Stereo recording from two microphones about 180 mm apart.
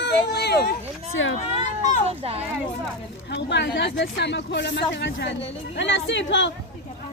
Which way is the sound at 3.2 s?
75° left (ahead or behind).